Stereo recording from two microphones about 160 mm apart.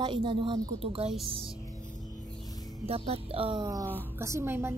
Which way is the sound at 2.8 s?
40° right (ahead or behind).